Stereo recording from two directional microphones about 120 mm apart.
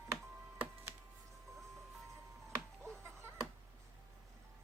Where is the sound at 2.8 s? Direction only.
25° right (ahead or behind).